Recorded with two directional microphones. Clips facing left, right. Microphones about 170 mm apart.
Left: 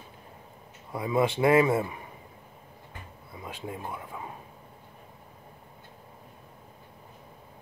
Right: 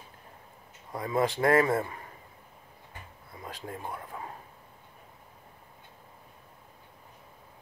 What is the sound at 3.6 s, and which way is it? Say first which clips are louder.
Speech: left 2 dB; 5° left (ahead or behind).